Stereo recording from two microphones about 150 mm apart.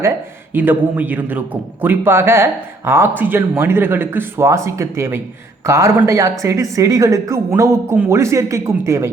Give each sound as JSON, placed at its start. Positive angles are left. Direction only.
{"t": 0.5, "sound": "speech", "side_deg": -10}